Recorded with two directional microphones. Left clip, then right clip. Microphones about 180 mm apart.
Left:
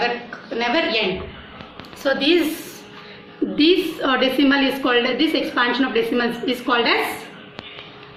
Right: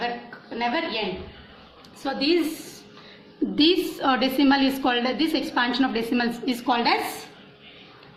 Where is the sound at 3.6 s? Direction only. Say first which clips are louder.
Left 3 dB; 70° right (ahead or behind).